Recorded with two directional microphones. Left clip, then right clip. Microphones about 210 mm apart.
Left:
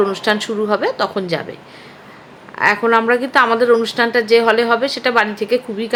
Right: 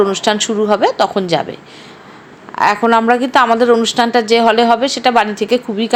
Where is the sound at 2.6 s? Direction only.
20° right (ahead or behind).